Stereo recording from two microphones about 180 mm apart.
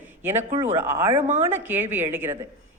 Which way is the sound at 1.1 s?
40° right (ahead or behind).